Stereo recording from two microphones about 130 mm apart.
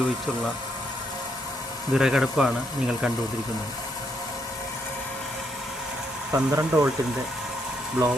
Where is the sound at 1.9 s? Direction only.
5° right (ahead or behind).